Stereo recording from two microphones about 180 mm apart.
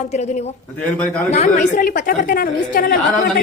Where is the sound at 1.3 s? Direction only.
40° left (ahead or behind).